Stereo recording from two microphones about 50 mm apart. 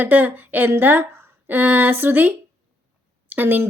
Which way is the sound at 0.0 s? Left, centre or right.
Right.